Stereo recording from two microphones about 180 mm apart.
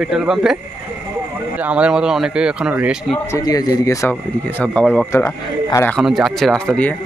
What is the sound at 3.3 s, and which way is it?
Speech, 20° left (ahead or behind).